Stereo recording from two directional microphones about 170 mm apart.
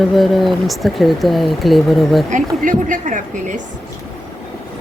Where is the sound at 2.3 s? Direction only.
50° right (ahead or behind).